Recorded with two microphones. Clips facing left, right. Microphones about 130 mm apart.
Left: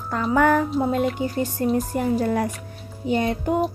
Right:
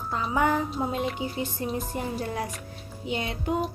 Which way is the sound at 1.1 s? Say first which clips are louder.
Left 6 dB; 40° left (ahead or behind).